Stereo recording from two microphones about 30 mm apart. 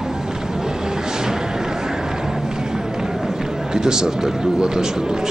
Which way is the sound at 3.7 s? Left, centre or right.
Right.